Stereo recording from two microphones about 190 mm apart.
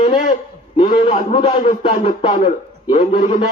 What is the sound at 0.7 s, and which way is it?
Speech, 25° left (ahead or behind).